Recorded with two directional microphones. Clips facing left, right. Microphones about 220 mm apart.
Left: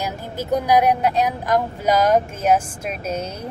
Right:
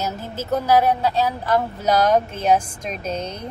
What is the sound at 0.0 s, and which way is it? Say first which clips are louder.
Speech: even; 15° left (ahead or behind).